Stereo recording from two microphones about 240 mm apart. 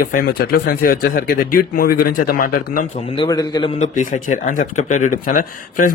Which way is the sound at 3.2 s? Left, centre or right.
Centre.